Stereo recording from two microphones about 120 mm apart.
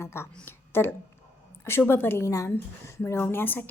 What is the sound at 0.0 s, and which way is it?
A woman's voice, 20° left (ahead or behind).